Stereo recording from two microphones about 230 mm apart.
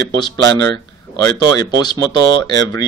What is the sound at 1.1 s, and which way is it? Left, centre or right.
Speech, centre.